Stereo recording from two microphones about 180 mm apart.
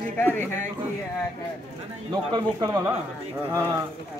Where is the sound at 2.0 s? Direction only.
20° right (ahead or behind).